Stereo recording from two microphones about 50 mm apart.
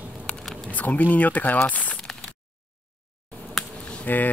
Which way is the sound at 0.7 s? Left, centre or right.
Left.